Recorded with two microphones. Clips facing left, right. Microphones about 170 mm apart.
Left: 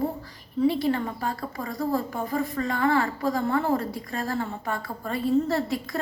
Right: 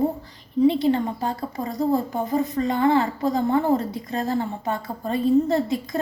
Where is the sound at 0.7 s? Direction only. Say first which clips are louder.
Right 4 dB; 20° right (ahead or behind).